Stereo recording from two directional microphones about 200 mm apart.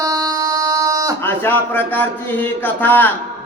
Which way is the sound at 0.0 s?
20° right (ahead or behind).